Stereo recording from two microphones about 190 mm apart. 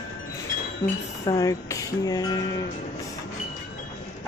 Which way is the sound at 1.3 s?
15° left (ahead or behind).